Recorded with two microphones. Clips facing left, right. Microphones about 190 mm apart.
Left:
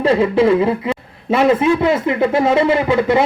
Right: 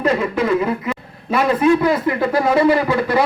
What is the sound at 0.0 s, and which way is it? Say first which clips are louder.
A man's voice: left 5 dB; 30° left (ahead or behind).